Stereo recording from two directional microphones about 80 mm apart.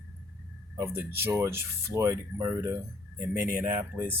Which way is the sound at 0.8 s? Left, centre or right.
Right.